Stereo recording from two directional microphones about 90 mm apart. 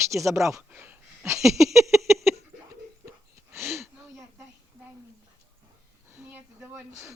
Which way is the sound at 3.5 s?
30° right (ahead or behind).